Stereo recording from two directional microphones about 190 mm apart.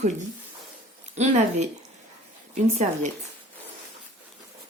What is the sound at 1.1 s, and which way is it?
Speech, 35° right (ahead or behind).